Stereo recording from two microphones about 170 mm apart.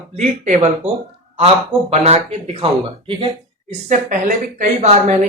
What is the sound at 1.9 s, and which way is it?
A woman's voice, 35° right (ahead or behind).